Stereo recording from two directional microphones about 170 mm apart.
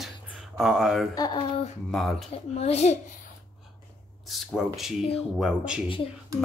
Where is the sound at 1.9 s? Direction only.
Centre (ahead or behind).